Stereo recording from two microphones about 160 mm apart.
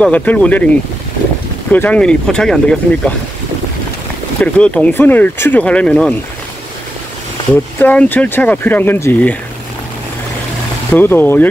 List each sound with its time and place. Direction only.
0.0 s speech: 10° left (ahead or behind)
1.7 s speech: 10° left (ahead or behind)
4.4 s speech: 10° left (ahead or behind)
7.8 s speech: 10° left (ahead or behind)
10.9 s speech: 10° left (ahead or behind)